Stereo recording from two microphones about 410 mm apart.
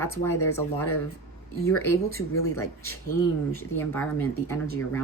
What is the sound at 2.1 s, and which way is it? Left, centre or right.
Speech, left.